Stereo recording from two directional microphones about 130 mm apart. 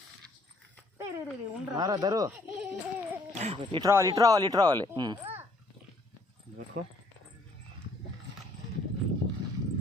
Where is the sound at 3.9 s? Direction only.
25° right (ahead or behind).